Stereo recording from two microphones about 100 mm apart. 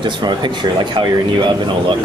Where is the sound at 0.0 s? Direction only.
50° right (ahead or behind).